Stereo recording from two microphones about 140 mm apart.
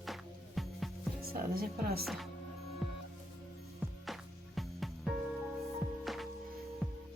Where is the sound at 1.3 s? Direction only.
90° right.